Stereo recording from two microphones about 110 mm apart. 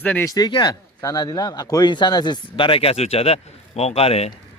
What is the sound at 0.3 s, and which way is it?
Speech, 40° left (ahead or behind).